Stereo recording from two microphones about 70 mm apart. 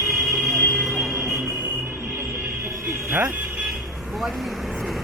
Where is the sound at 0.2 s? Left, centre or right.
Centre.